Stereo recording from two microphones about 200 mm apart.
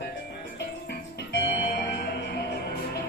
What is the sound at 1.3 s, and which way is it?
Music, 55° left (ahead or behind).